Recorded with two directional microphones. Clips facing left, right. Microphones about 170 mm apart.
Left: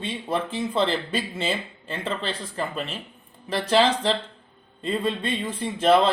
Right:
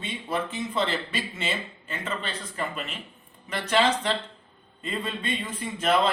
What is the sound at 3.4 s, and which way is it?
Speech, 30° left (ahead or behind).